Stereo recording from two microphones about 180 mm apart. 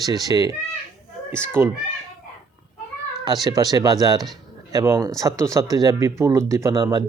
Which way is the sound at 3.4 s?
20° right (ahead or behind).